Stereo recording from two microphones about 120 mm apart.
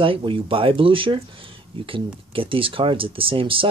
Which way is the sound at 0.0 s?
45° right (ahead or behind).